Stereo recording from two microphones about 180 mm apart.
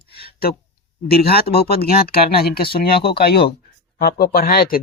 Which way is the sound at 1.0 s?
60° left (ahead or behind).